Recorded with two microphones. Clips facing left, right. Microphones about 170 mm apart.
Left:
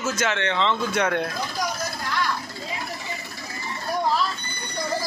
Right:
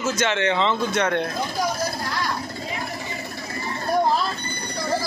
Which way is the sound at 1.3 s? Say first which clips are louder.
Right 3 dB; 35° right (ahead or behind).